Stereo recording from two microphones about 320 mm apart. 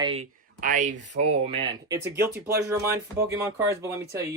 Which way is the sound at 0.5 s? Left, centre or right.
Right.